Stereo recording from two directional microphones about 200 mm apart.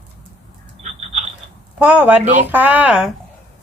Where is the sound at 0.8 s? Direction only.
35° right (ahead or behind).